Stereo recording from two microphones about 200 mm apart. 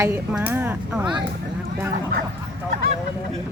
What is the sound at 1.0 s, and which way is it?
Speech, 25° right (ahead or behind).